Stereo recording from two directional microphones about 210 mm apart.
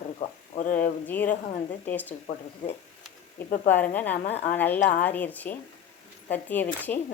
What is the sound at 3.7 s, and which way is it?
A woman's voice, 10° left (ahead or behind).